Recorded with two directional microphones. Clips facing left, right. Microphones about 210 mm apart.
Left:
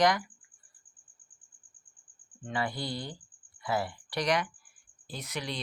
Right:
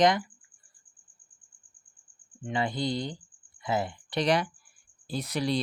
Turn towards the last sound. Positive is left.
turn(degrees=-35)  # may be behind; listen again after turning